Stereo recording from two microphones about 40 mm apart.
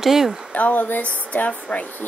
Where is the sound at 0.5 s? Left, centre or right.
Left.